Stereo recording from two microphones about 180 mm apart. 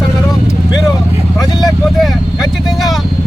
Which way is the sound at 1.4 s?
20° left (ahead or behind).